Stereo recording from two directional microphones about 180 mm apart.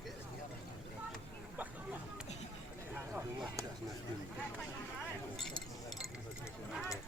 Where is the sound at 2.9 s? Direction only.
10° right (ahead or behind).